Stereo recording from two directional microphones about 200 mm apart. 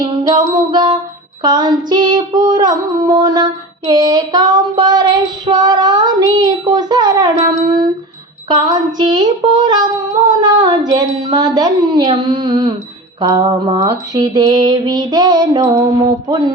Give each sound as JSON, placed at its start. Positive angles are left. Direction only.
{"t": 0.5, "sound": "music", "side_deg": -20}
{"t": 1.4, "sound": "female singing", "side_deg": -20}
{"t": 13.2, "sound": "a sound", "side_deg": -20}